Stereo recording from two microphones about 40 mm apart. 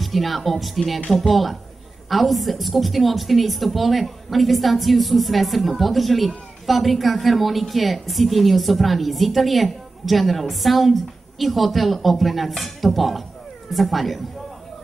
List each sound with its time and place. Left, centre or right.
0.0 s a woman's voice: centre